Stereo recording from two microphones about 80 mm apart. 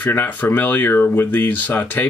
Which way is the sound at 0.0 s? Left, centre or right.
Left.